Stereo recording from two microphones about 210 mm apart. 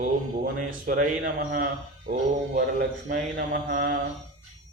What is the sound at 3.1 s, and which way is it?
Speech, 45° right (ahead or behind).